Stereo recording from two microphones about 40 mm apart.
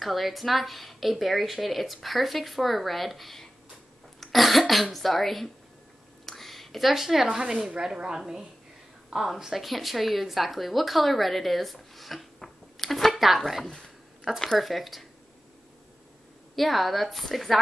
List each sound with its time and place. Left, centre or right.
0.0 s a woman's voice: centre
6.2 s a sound: centre
7.2 s speech: centre
9.1 s a woman's voice: centre
14.6 s a woman's voice: centre
16.5 s a woman's voice: centre